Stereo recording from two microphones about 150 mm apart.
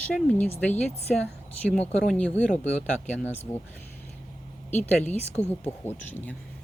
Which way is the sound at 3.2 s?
15° left (ahead or behind).